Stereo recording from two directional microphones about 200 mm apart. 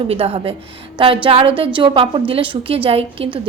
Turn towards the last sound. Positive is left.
turn(degrees=-25)  # may be behind; listen again after turning